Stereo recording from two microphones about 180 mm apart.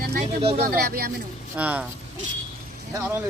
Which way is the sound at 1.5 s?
10° right (ahead or behind).